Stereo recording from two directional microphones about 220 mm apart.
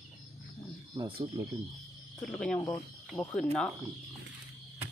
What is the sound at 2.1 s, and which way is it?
Speech, 5° left (ahead or behind).